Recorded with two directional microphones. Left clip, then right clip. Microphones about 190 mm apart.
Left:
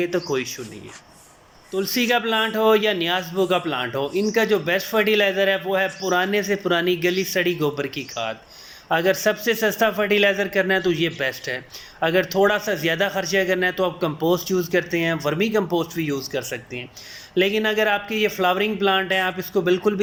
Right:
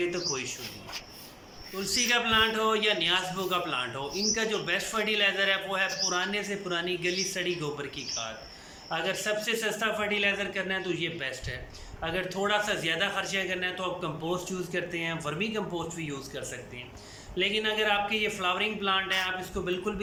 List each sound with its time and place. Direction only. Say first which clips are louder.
0.0 s speech: left 8 dB; 30° left (ahead or behind)
1.7 s speech: left 6 dB; 30° left (ahead or behind)